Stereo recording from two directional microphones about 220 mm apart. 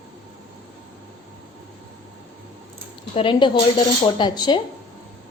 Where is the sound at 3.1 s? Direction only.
25° left (ahead or behind).